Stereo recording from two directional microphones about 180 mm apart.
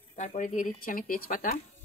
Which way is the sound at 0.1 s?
40° left (ahead or behind).